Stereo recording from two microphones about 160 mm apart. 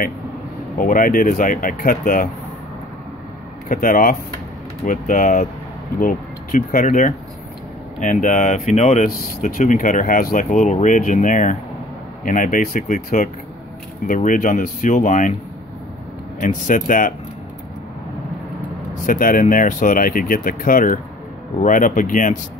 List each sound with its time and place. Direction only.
0.7 s speech: 60° left (ahead or behind)
3.6 s speech: 55° left (ahead or behind)
16.3 s speech: 55° left (ahead or behind)
19.0 s speech: 60° left (ahead or behind)